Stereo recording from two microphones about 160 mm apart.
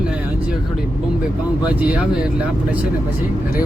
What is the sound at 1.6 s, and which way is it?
Speech, 10° right (ahead or behind).